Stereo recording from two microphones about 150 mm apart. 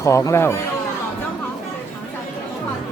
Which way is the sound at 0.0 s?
20° left (ahead or behind).